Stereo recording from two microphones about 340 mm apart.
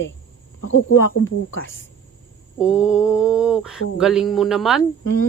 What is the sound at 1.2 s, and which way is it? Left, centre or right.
Speech, left.